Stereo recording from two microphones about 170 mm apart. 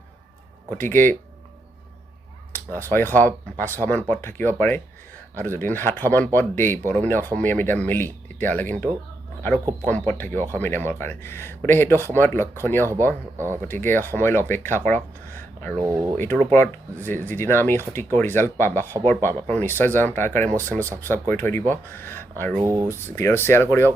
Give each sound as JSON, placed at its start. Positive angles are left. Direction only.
{"t": 0.8, "sound": "speech", "side_deg": 10}
{"t": 2.5, "sound": "speech", "side_deg": 10}
{"t": 10.1, "sound": "speech", "side_deg": 10}
{"t": 15.8, "sound": "speech", "side_deg": -20}
{"t": 16.1, "sound": "speech", "side_deg": 10}
{"t": 22.6, "sound": "speech", "side_deg": -15}
{"t": 22.9, "sound": "speech", "side_deg": 15}